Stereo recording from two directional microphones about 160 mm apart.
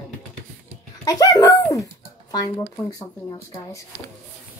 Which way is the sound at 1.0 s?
25° left (ahead or behind).